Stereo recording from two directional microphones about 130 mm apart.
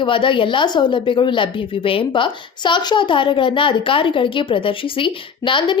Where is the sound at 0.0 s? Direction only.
40° left (ahead or behind).